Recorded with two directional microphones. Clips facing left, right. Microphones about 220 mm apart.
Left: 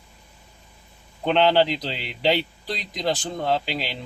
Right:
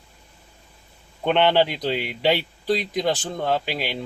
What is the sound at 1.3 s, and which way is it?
Speech, centre (ahead or behind).